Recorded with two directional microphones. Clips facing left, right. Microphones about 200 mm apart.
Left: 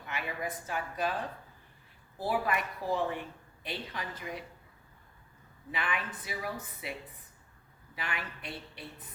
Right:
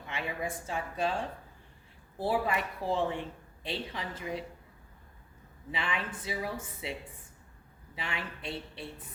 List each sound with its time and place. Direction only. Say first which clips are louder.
0.1 s speech: right 1 dB; 25° right (ahead or behind)
5.7 s speech: right 1 dB; 25° right (ahead or behind)
7.9 s speech: right 1 dB; 25° right (ahead or behind)